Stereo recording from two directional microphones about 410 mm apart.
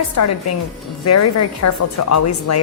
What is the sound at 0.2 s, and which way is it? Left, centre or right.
A woman's voice, left.